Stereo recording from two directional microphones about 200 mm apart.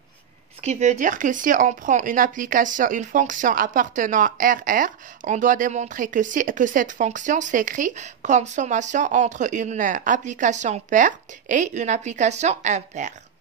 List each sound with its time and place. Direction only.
0.6 s speech: 35° right (ahead or behind)